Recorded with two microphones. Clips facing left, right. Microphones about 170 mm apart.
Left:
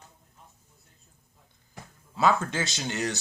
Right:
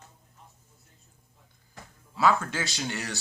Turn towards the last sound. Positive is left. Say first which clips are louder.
# left 3 dB
turn(degrees=20)  # may be behind; listen again after turning